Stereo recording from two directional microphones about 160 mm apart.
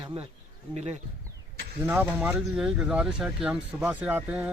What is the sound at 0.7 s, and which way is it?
Speech, 45° right (ahead or behind).